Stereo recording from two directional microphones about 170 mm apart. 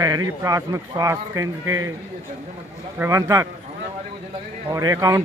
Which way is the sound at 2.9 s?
20° right (ahead or behind).